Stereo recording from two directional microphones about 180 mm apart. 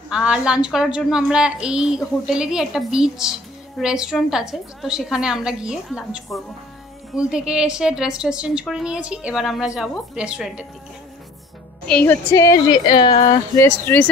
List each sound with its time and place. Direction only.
0.1 s a woman's voice: 5° right (ahead or behind)
11.9 s a woman's voice: 10° left (ahead or behind)